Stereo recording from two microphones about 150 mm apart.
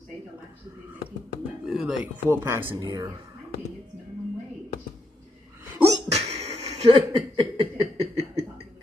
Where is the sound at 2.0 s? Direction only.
15° right (ahead or behind).